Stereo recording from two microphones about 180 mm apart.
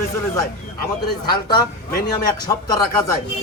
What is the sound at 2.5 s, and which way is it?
Speech, 20° left (ahead or behind).